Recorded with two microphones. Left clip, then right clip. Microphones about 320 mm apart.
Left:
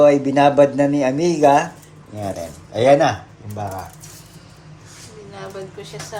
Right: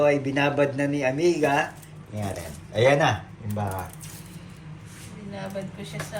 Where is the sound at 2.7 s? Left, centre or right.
Centre.